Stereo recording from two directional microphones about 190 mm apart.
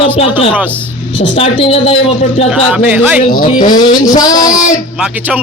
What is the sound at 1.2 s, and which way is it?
Speech, 40° left (ahead or behind).